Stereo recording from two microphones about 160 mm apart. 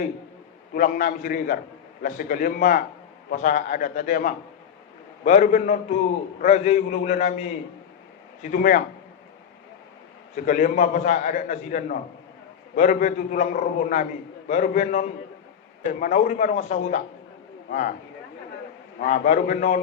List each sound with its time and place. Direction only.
0.7 s a man's voice: 60° left (ahead or behind)
10.3 s a man's voice: 55° left (ahead or behind)
17.7 s speech: 60° left (ahead or behind)
18.9 s a man's voice: 55° left (ahead or behind)